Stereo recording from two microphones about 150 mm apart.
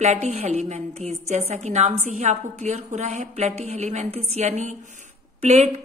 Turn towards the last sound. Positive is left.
turn(degrees=-50)  # may be behind; listen again after turning